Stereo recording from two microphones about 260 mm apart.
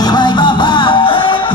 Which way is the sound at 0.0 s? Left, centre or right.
Centre.